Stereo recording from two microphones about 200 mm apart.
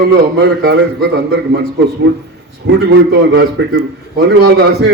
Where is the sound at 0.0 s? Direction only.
55° right (ahead or behind).